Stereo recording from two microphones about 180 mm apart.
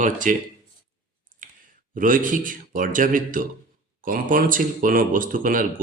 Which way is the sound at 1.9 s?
50° right (ahead or behind).